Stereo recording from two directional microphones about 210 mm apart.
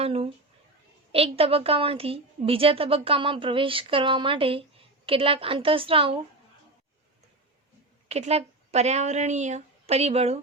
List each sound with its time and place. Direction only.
0.0 s a woman's voice: 25° right (ahead or behind)
8.0 s speech: 30° right (ahead or behind)